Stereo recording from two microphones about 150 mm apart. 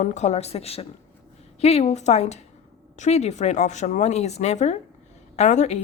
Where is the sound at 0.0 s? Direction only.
50° left (ahead or behind).